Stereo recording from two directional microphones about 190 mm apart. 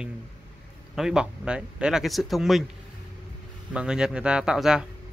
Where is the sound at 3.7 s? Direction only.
5° right (ahead or behind).